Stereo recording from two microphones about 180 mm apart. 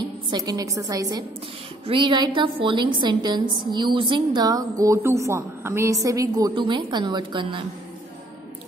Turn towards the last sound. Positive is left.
turn(degrees=-25)  # may be behind; listen again after turning